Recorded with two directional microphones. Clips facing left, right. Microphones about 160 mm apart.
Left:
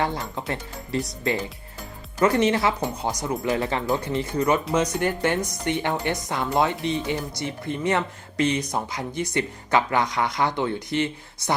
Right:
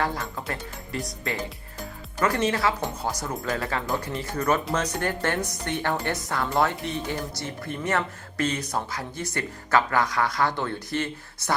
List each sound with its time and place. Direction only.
0.0 s speech: 25° left (ahead or behind)
2.2 s speech: 20° left (ahead or behind)